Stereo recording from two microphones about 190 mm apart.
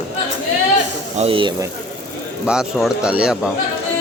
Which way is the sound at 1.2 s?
30° right (ahead or behind).